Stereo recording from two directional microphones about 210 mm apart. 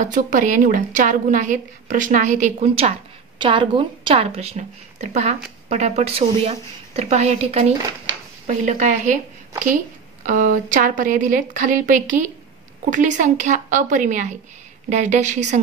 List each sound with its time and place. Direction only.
0.0 s a woman's voice: 35° right (ahead or behind)
10.2 s a woman's voice: 40° right (ahead or behind)